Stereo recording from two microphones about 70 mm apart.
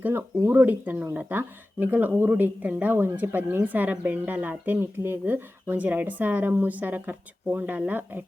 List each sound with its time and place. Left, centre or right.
0.1 s speech: right